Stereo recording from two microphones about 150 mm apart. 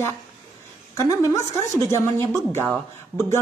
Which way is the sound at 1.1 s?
20° left (ahead or behind).